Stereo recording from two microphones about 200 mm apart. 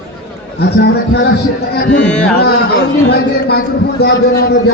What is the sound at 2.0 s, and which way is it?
Music, 5° left (ahead or behind).